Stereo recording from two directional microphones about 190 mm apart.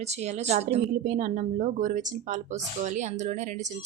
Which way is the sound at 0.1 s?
35° right (ahead or behind).